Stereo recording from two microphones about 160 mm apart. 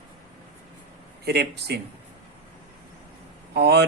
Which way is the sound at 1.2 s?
90° right.